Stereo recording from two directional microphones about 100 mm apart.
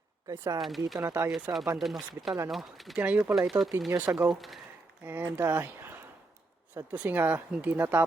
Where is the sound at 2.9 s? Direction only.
10° right (ahead or behind).